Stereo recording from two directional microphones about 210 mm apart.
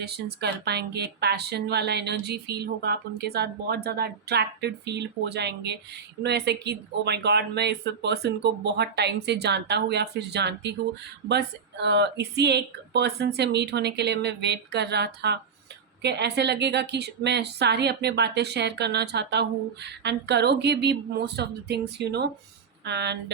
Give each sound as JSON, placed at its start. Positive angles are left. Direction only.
{"t": 0.0, "sound": "speech", "side_deg": -50}